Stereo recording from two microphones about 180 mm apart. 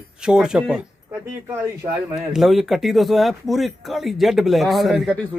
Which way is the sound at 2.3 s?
Centre (ahead or behind).